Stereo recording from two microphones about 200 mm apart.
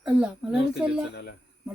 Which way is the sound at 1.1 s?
55° left (ahead or behind).